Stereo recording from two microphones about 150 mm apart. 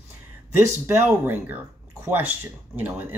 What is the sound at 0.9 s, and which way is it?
Speech, 15° right (ahead or behind).